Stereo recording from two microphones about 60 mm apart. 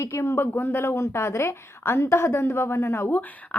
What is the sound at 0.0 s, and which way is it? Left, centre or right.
A woman's voice, left.